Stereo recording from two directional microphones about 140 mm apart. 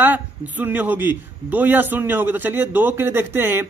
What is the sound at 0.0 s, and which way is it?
Speech, 10° right (ahead or behind).